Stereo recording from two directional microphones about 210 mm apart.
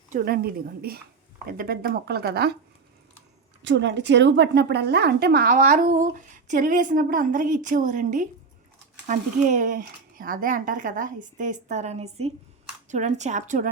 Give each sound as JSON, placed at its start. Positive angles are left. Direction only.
{"t": 0.1, "sound": "speech", "side_deg": -45}
{"t": 3.6, "sound": "a woman's voice", "side_deg": -55}